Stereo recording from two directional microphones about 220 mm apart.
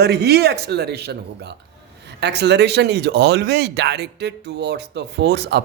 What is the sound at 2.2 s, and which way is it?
Speech, 50° right (ahead or behind).